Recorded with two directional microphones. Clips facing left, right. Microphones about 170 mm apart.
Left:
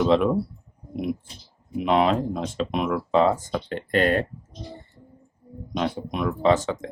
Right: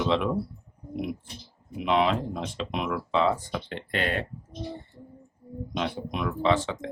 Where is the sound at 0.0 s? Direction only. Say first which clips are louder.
Left 6 dB; 45° left (ahead or behind).